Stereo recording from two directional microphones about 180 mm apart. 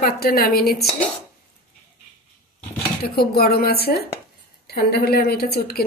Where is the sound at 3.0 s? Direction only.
60° left (ahead or behind).